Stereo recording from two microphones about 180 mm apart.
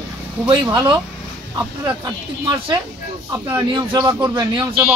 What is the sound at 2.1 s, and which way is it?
Speech, 20° right (ahead or behind).